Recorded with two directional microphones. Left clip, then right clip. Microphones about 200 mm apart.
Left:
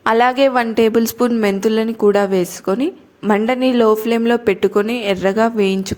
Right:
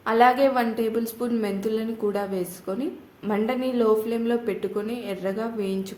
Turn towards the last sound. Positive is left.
turn(degrees=40)  # may be behind; listen again after turning